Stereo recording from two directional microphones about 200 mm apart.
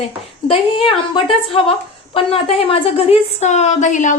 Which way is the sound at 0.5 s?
25° left (ahead or behind).